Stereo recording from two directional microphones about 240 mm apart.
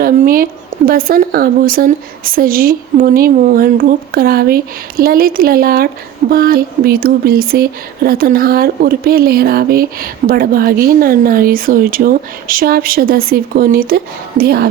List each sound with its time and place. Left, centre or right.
0.0 s a woman's voice: right